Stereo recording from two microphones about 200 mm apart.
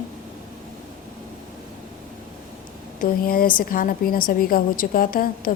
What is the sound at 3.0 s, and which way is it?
A woman's voice, 45° left (ahead or behind).